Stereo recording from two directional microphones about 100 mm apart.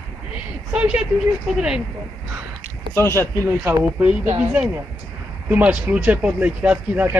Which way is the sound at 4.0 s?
15° right (ahead or behind).